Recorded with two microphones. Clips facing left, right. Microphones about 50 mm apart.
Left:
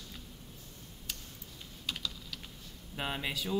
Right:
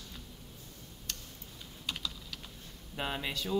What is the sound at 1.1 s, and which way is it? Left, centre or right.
Tick-tock, centre.